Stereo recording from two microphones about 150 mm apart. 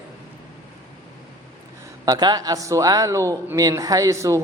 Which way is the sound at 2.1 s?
25° right (ahead or behind).